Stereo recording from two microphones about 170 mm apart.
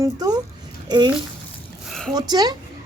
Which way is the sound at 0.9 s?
25° right (ahead or behind).